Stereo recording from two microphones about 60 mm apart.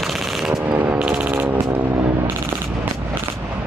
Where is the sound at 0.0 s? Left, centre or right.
Centre.